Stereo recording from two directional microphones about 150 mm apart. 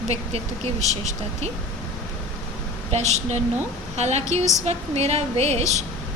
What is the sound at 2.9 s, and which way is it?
A woman's voice, 50° right (ahead or behind).